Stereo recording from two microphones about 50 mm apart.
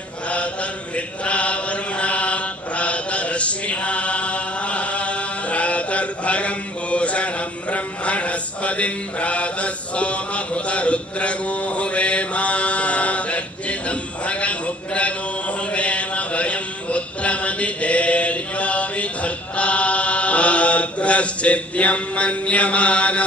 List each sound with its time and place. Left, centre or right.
0.3 s mantra: left